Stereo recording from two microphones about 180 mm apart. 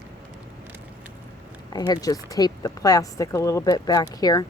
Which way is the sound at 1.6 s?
25° left (ahead or behind).